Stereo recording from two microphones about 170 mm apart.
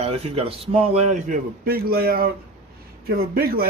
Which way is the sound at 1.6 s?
65° right (ahead or behind).